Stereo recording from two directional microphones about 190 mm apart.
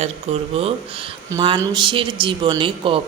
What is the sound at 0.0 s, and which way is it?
Speech, 30° right (ahead or behind).